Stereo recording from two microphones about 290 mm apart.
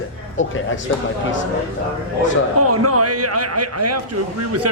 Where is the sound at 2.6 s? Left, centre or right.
Right.